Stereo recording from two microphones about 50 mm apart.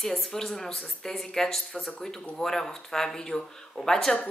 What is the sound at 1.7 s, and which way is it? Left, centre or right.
A woman's voice, left.